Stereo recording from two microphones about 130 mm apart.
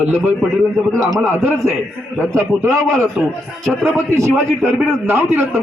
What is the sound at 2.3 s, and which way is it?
Speech, 20° right (ahead or behind).